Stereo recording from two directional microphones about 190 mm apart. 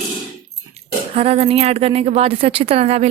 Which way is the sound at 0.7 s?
30° right (ahead or behind).